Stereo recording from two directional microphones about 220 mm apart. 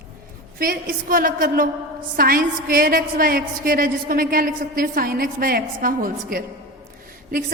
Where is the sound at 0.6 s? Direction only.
40° right (ahead or behind).